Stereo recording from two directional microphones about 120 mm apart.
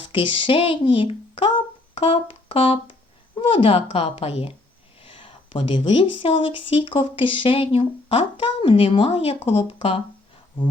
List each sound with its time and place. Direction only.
0.0 s a woman's voice: 45° left (ahead or behind)